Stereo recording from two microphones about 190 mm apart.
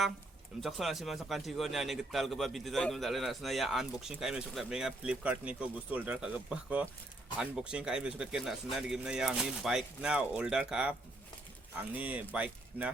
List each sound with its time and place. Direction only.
0.6 s a man's voice: centre (ahead or behind)